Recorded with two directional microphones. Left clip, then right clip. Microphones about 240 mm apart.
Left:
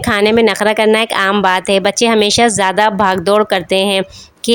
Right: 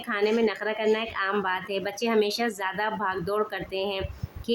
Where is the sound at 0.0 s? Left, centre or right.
Left.